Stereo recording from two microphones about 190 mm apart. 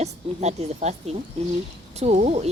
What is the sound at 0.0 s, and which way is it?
A woman's voice, 35° right (ahead or behind).